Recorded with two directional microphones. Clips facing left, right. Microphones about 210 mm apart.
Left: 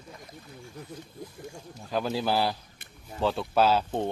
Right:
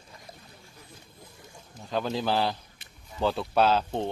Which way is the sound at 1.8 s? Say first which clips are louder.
Even; 5° left (ahead or behind).